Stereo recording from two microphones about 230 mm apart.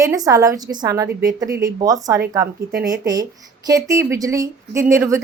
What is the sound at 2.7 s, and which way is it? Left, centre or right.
Speech, right.